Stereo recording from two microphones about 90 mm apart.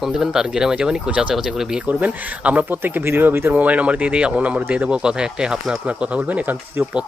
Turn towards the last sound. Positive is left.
turn(degrees=-20)  # may be behind; listen again after turning